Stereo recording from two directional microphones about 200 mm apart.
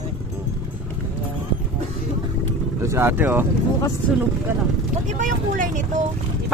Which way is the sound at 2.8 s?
15° right (ahead or behind).